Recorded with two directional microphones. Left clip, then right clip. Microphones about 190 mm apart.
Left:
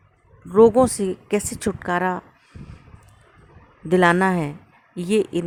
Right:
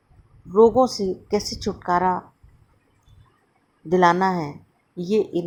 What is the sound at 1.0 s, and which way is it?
Speech, 15° left (ahead or behind).